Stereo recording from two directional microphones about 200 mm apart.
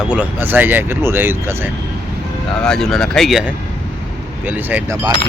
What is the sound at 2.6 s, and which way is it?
Speech, 5° left (ahead or behind).